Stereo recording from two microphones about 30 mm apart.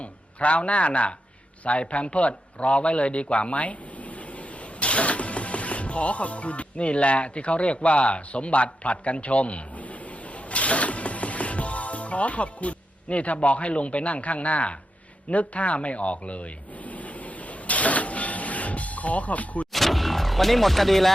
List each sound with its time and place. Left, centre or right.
0.0 s a man's voice: left
15.3 s a sound: left
19.7 s speech: centre